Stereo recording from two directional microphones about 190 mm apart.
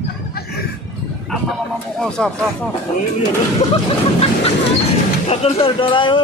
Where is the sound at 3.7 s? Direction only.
30° left (ahead or behind).